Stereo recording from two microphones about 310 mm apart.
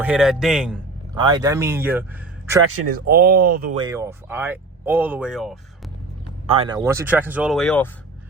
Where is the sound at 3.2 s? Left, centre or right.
Right.